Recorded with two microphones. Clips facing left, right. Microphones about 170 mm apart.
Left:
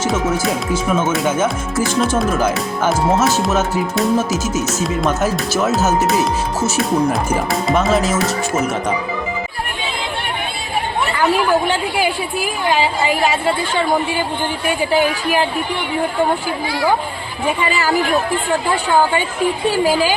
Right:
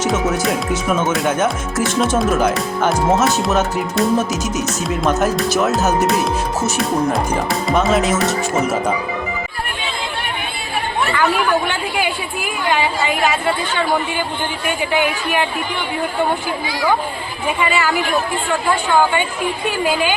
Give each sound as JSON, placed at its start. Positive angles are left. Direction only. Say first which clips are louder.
{"t": 0.0, "sound": "speech", "louder": "even", "side_deg": 0}
{"t": 11.9, "sound": "a woman's voice", "louder": "left 3 dB", "side_deg": 35}
{"t": 14.9, "sound": "a woman's voice", "louder": "left 2 dB", "side_deg": 35}
{"t": 17.7, "sound": "a woman's voice", "louder": "even", "side_deg": 35}
{"t": 19.7, "sound": "a woman's voice", "louder": "left 1 dB", "side_deg": 35}